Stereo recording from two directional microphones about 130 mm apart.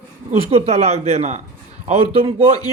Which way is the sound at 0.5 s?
55° right (ahead or behind).